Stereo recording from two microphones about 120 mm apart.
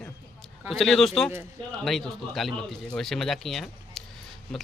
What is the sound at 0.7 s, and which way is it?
Speech, centre (ahead or behind).